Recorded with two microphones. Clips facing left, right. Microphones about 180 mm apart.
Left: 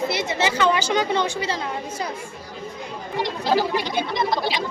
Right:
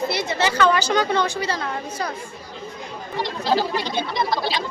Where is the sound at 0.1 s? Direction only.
20° left (ahead or behind).